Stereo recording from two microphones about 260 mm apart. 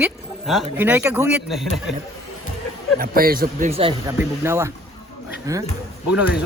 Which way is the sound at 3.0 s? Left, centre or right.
Right.